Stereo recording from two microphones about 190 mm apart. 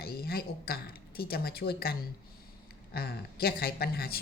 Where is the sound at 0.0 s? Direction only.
55° left (ahead or behind).